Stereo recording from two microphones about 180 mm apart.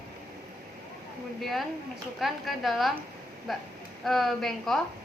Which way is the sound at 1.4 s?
Centre (ahead or behind).